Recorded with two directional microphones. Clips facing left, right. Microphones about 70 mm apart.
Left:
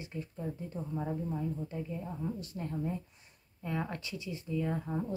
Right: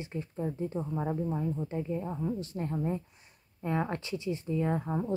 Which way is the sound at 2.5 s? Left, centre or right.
Right.